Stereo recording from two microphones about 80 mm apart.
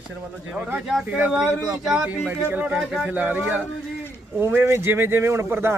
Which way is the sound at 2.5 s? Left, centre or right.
Right.